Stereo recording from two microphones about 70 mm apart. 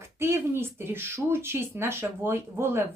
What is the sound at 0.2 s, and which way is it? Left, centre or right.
Speech, right.